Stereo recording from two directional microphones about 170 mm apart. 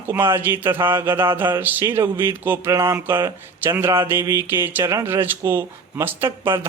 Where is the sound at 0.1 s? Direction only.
15° right (ahead or behind).